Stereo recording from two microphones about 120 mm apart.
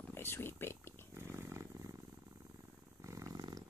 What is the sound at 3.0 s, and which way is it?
Purr, 25° right (ahead or behind).